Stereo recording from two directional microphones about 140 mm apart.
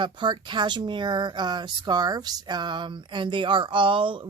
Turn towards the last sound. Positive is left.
turn(degrees=-35)  # may be behind; listen again after turning